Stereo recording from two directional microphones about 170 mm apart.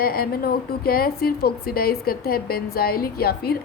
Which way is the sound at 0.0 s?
60° left (ahead or behind).